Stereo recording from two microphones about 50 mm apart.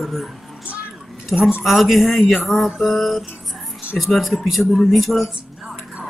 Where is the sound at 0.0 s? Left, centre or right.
Centre.